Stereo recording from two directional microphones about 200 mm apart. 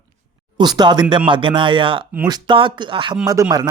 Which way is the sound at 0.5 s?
20° right (ahead or behind).